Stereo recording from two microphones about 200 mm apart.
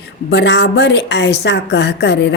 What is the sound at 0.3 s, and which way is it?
Speech, 60° left (ahead or behind).